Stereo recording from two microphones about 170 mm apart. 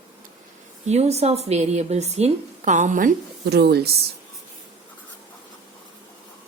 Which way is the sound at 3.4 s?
75° right (ahead or behind).